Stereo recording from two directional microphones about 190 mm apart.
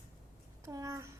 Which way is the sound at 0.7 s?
15° right (ahead or behind).